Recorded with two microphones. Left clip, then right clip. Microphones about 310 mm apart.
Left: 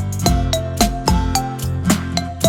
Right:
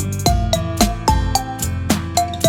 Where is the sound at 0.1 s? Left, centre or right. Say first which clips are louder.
Right 1 dB; centre.